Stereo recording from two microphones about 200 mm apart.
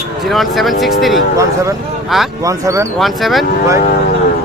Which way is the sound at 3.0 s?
Centre (ahead or behind).